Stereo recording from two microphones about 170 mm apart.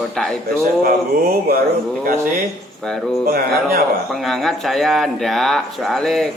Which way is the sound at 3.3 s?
65° right (ahead or behind).